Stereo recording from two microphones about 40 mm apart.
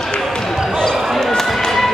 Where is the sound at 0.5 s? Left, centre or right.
Centre.